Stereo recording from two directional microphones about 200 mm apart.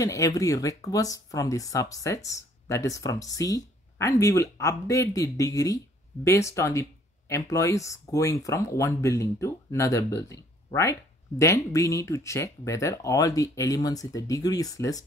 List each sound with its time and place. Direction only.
0.0 s speech: 15° left (ahead or behind)